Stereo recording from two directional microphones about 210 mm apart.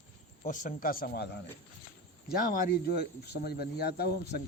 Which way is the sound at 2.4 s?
45° left (ahead or behind).